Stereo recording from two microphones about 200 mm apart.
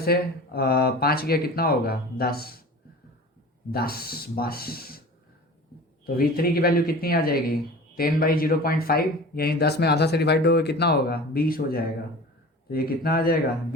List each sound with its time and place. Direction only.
0.0 s speech: 50° left (ahead or behind)
3.7 s speech: 50° left (ahead or behind)
6.1 s speech: 50° left (ahead or behind)